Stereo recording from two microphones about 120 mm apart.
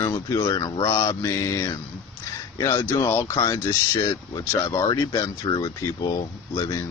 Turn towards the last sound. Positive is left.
turn(degrees=25)  # may be behind; listen again after turning